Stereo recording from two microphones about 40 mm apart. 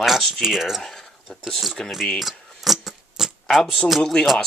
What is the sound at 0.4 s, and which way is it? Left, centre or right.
Speech, centre.